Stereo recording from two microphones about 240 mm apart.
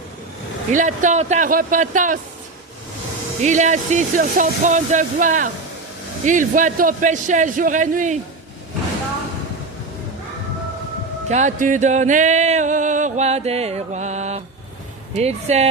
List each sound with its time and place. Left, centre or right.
0.7 s speech: right
3.4 s speech: right
11.3 s music: right